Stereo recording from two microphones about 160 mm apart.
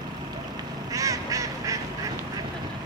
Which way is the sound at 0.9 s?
20° right (ahead or behind).